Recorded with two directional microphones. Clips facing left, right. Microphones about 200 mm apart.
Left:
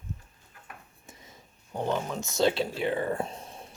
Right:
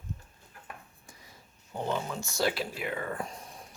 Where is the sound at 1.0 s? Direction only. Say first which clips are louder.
Left 3 dB; 25° left (ahead or behind).